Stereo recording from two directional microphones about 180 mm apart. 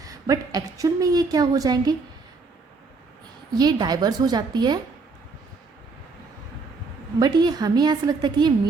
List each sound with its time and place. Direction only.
0.0 s a woman's voice: 20° right (ahead or behind)
3.5 s a woman's voice: 25° right (ahead or behind)
7.2 s a woman's voice: 25° right (ahead or behind)